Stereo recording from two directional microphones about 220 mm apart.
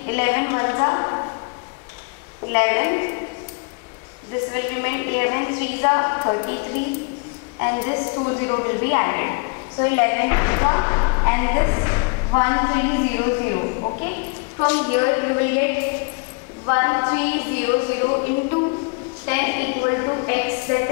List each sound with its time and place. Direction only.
0.1 s a woman's voice: 15° left (ahead or behind)
2.5 s a woman's voice: 15° left (ahead or behind)
4.6 s a woman's voice: 15° left (ahead or behind)
7.6 s a woman's voice: 20° left (ahead or behind)
14.7 s a woman's voice: 15° left (ahead or behind)